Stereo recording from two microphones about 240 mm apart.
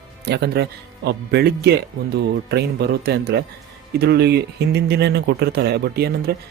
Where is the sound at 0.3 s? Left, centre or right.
Right.